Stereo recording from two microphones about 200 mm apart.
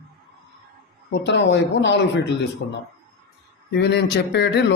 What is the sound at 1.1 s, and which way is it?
Speech, 60° left (ahead or behind).